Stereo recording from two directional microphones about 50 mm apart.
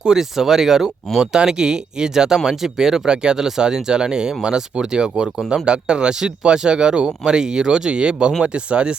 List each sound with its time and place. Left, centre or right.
0.0 s speech: centre